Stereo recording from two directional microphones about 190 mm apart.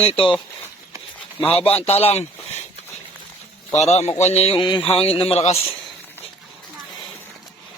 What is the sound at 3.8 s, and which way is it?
A man's voice, 35° left (ahead or behind).